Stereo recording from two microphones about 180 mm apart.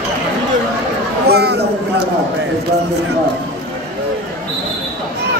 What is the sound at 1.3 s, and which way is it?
Chatter, 65° right (ahead or behind).